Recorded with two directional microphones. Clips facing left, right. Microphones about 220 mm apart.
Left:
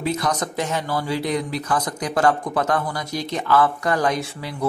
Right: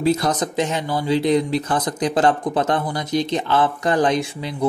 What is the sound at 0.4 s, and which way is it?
Speech, 20° right (ahead or behind).